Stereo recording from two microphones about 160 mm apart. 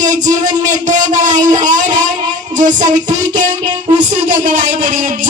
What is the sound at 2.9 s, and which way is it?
Speech, 50° right (ahead or behind).